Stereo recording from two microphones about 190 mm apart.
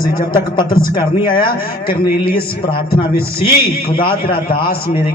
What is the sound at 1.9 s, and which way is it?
Speech, 50° left (ahead or behind).